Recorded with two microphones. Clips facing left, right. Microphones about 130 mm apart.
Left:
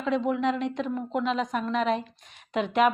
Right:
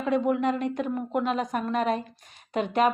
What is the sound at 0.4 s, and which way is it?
A woman's voice, 45° right (ahead or behind).